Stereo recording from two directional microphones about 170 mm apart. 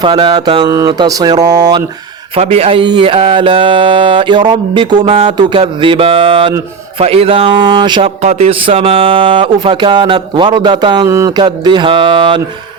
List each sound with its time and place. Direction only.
0.0 s speech: 25° right (ahead or behind)
2.3 s music: 35° right (ahead or behind)
8.2 s speech: 40° right (ahead or behind)